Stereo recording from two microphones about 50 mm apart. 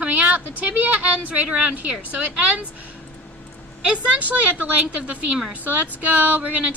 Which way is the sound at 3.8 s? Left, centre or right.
Right.